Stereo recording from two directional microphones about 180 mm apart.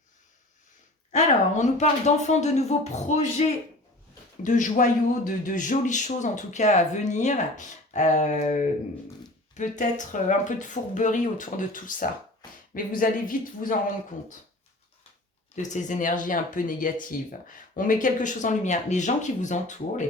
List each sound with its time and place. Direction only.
1.1 s a man's voice: 40° left (ahead or behind)
15.5 s a man's voice: 45° left (ahead or behind)